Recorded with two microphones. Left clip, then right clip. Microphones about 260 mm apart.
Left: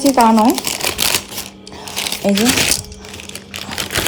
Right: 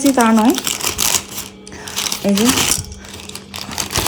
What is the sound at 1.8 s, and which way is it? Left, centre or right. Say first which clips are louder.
Coin: left 1 dB; centre.